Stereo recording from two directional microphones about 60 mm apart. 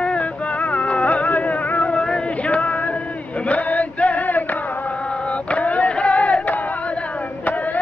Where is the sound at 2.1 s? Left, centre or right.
Centre.